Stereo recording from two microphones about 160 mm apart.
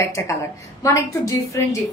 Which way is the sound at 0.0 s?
20° left (ahead or behind).